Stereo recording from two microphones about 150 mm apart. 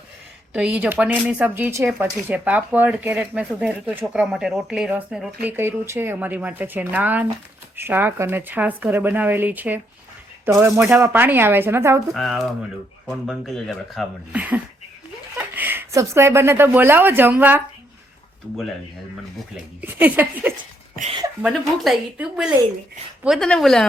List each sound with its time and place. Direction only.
0.5 s speech: 5° right (ahead or behind)
12.1 s speech: centre (ahead or behind)
14.3 s speech: 10° right (ahead or behind)
19.8 s speech: 10° right (ahead or behind)